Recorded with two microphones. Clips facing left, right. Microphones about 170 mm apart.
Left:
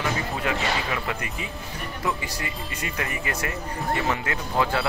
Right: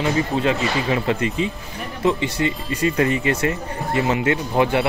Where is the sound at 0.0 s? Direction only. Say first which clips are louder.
Right 8 dB; 25° right (ahead or behind).